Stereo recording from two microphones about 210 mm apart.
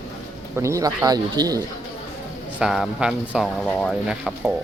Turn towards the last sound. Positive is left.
turn(degrees=-5)  # may be behind; listen again after turning